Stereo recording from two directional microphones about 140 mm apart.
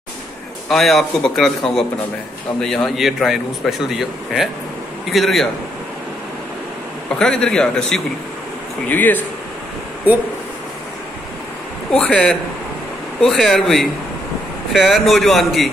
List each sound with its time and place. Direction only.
0.7 s speech: centre (ahead or behind)
2.6 s speech: 5° left (ahead or behind)
7.2 s a man's voice: 5° left (ahead or behind)
11.9 s speech: 5° left (ahead or behind)